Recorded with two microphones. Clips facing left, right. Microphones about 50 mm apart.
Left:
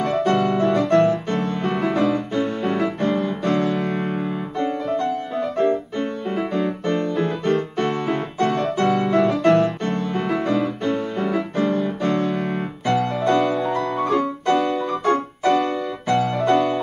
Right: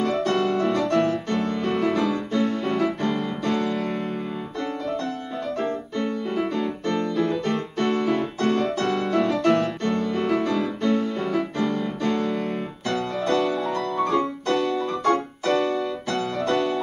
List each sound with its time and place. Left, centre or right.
0.2 s piano: centre
0.7 s music: centre
8.8 s piano: centre
10.1 s music: centre
10.5 s music: centre
13.9 s piano: centre